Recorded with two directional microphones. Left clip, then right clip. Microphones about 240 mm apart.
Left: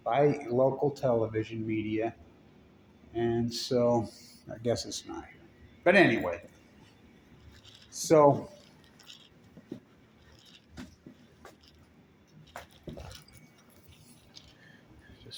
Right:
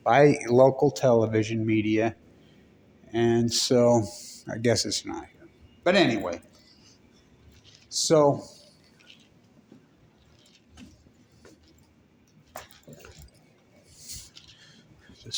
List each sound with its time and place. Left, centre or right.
0.0 s speech: right
4.8 s speech: right
5.8 s a man's voice: centre
8.0 s a man's voice: centre
14.1 s a sound: right
15.3 s a sound: right